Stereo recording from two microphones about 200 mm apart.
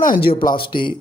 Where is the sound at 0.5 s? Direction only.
25° left (ahead or behind).